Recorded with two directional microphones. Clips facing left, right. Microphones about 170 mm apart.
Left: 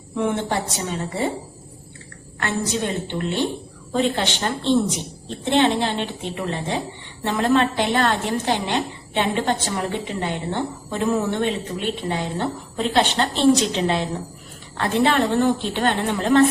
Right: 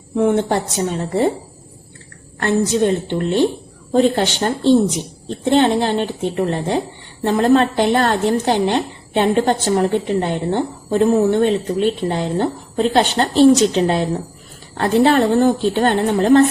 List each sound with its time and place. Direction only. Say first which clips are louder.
0.2 s a woman's voice: right 6 dB; 40° right (ahead or behind)
2.4 s a woman's voice: right 8 dB; 40° right (ahead or behind)